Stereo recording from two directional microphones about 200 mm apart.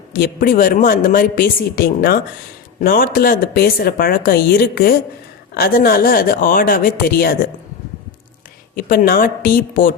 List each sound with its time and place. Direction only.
0.1 s speech: 45° left (ahead or behind)
8.7 s speech: 45° left (ahead or behind)